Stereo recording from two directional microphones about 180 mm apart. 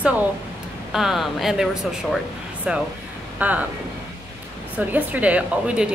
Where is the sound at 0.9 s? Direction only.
Centre (ahead or behind).